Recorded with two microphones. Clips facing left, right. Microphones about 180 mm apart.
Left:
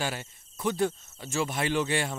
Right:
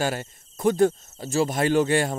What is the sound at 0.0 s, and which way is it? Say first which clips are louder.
Speech: right 7 dB; 45° right (ahead or behind).